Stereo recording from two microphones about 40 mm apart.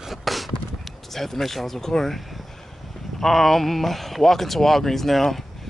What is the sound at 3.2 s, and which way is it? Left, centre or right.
Speech, centre.